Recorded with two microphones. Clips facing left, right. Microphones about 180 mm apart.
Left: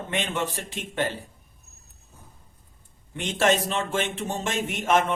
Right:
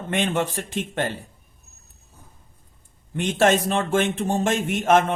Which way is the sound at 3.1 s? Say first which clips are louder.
Right 4 dB; 50° right (ahead or behind).